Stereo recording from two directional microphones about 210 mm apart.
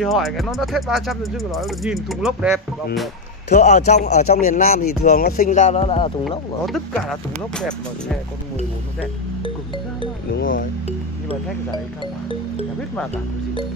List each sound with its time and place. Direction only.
0.0 s speech: centre (ahead or behind)
3.5 s speech: 35° left (ahead or behind)
6.6 s speech: centre (ahead or behind)
10.3 s speech: 40° left (ahead or behind)